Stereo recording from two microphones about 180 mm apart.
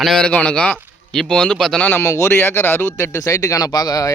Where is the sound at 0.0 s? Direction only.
5° left (ahead or behind).